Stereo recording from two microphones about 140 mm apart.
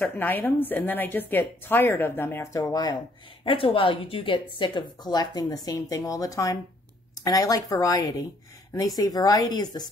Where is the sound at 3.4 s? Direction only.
40° left (ahead or behind).